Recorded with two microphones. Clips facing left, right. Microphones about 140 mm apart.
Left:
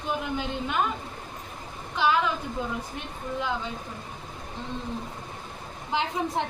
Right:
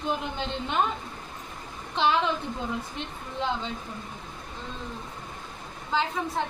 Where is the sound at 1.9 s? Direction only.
25° right (ahead or behind).